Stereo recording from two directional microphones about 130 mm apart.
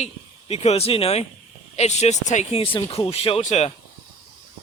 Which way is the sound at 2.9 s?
50° left (ahead or behind).